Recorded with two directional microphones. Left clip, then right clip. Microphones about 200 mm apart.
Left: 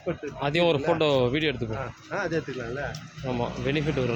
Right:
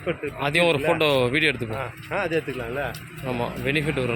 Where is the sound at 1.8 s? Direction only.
25° right (ahead or behind).